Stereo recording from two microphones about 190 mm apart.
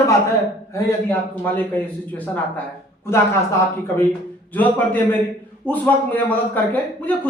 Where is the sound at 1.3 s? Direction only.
10° left (ahead or behind).